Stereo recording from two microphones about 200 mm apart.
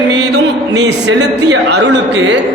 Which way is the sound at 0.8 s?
60° right (ahead or behind).